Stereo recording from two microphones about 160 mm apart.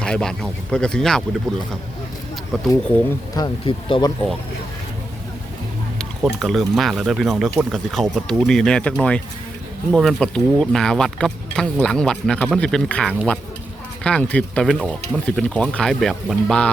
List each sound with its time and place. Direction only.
0.0 s speech: 5° left (ahead or behind)
3.3 s speech: 30° left (ahead or behind)
6.2 s speech: centre (ahead or behind)